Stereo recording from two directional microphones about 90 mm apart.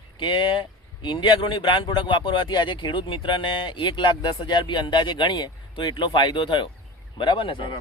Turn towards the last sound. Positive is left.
turn(degrees=70)  # may be behind; listen again after turning